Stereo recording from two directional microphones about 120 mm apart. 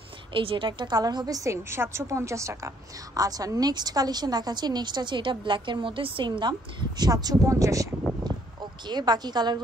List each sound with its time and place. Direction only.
0.3 s a woman's voice: 45° right (ahead or behind)
7.0 s a woman's voice: 35° right (ahead or behind)